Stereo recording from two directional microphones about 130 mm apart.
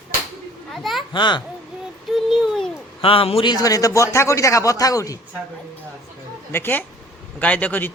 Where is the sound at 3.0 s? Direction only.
45° left (ahead or behind).